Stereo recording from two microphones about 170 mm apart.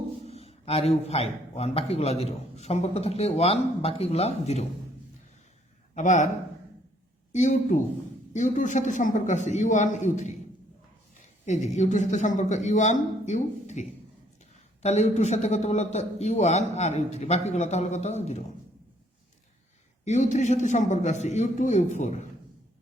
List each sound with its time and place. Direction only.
0.3 s a man's voice: 35° left (ahead or behind)
5.9 s speech: 45° left (ahead or behind)
7.3 s a man's voice: 45° left (ahead or behind)
11.4 s a man's voice: 45° left (ahead or behind)
20.1 s a man's voice: 45° left (ahead or behind)